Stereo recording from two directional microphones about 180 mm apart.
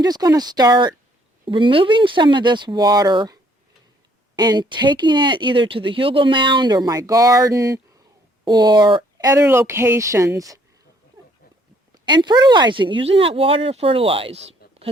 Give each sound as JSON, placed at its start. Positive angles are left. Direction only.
{"t": 0.0, "sound": "speech", "side_deg": -20}
{"t": 4.4, "sound": "speech", "side_deg": -25}
{"t": 12.0, "sound": "speech", "side_deg": -25}